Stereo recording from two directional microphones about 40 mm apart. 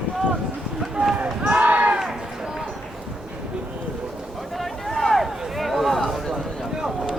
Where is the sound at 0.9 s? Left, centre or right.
Centre.